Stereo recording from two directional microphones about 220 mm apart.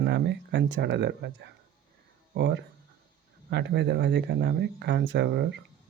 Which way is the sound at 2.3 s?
50° right (ahead or behind).